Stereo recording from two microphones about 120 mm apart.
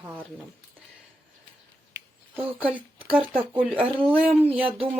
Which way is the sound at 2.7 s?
15° right (ahead or behind).